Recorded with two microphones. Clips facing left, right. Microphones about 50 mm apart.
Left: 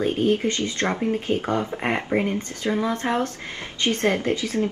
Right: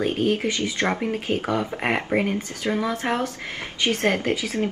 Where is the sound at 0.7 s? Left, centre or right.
Centre.